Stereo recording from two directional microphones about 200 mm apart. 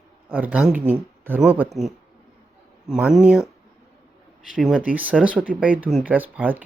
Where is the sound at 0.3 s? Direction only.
10° right (ahead or behind).